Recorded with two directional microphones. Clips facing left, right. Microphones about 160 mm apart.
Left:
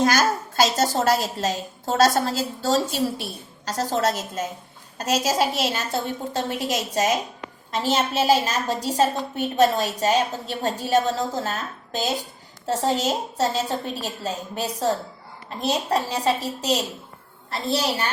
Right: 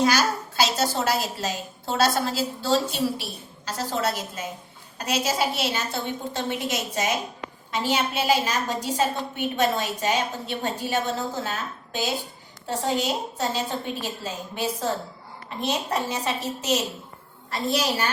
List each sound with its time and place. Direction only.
0.0 s a woman's voice: 50° left (ahead or behind); by 18.0 s 30° left (ahead or behind)